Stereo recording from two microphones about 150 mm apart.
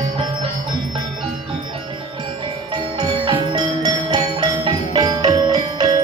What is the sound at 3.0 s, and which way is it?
Music, 30° right (ahead or behind).